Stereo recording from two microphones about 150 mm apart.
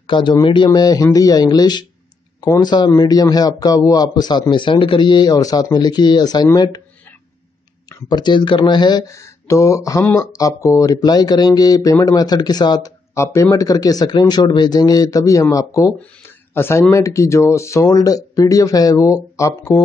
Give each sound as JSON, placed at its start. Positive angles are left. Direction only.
{"t": 0.0, "sound": "speech", "side_deg": 30}
{"t": 8.1, "sound": "speech", "side_deg": 30}